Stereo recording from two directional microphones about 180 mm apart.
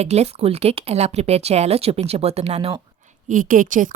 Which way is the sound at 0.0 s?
35° right (ahead or behind).